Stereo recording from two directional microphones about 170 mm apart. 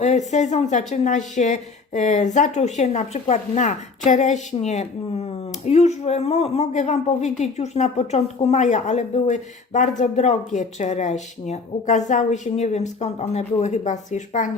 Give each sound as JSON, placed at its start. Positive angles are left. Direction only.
{"t": 0.0, "sound": "a woman's voice", "side_deg": 45}